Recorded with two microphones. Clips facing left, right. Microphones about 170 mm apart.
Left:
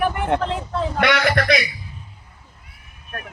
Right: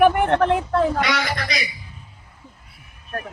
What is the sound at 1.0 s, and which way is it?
Speech, 60° left (ahead or behind).